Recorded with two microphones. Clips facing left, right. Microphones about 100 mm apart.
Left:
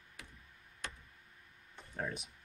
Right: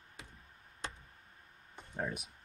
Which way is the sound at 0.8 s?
25° right (ahead or behind).